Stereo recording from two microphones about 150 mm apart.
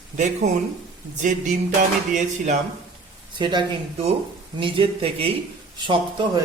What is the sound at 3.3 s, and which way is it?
Speech, 30° right (ahead or behind).